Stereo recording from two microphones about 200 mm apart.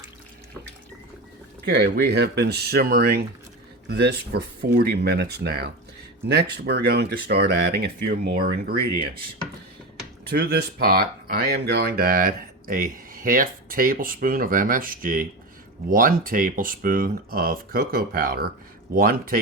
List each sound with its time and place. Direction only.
1.6 s speech: 55° right (ahead or behind)
10.3 s speech: 50° right (ahead or behind)